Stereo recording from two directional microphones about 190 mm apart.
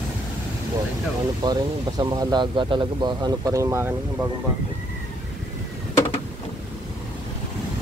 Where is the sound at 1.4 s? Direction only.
20° right (ahead or behind).